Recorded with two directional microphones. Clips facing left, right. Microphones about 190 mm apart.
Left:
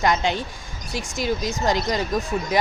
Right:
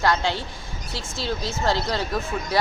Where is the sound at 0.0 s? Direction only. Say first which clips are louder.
Left 1 dB; 20° left (ahead or behind).